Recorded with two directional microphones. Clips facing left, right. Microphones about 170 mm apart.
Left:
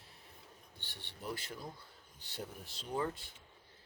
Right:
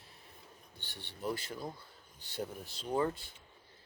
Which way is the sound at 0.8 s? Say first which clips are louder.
Right 7 dB; 45° right (ahead or behind).